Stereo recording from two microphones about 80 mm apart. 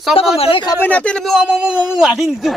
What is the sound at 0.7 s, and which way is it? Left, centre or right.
Speech, centre.